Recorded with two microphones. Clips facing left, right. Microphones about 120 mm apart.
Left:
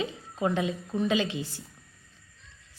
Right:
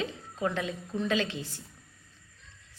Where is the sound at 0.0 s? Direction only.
15° left (ahead or behind).